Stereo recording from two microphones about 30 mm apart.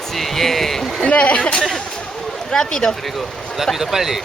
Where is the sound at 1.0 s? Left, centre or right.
Left.